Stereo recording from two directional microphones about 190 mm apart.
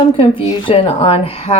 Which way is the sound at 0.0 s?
30° left (ahead or behind).